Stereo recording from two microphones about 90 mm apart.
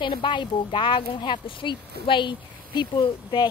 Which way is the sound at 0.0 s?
65° left (ahead or behind).